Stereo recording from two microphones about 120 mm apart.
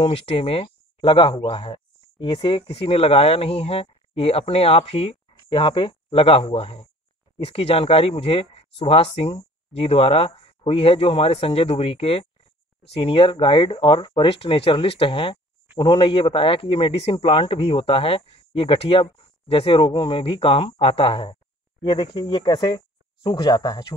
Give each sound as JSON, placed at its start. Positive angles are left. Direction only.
{"t": 0.0, "sound": "speech", "side_deg": 55}